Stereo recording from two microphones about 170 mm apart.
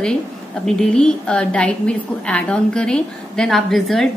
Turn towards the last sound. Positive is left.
turn(degrees=0)  # may be behind; listen again after turning